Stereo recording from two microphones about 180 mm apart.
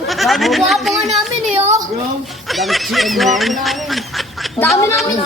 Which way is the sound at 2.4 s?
Centre (ahead or behind).